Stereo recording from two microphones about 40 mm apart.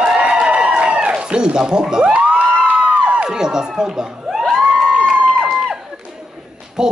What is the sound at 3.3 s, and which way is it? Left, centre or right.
Speech, centre.